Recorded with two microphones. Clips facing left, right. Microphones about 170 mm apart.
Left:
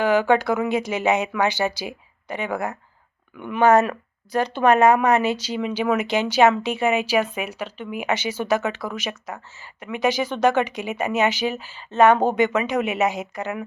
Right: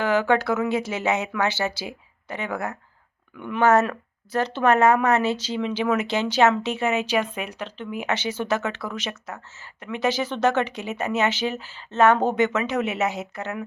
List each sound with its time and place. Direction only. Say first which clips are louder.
0.0 s speech: left 3 dB; 15° left (ahead or behind)